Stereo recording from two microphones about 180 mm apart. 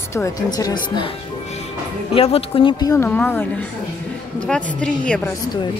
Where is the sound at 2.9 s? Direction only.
10° left (ahead or behind).